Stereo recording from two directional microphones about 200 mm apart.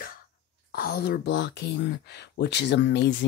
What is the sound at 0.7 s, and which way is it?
Speech, 50° left (ahead or behind).